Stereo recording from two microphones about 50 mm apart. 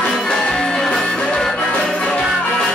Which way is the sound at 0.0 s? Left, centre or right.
Centre.